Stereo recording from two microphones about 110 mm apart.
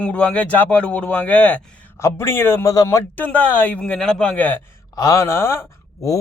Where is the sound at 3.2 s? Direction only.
15° left (ahead or behind).